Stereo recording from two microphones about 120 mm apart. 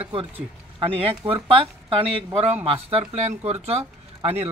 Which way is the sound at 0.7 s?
50° right (ahead or behind).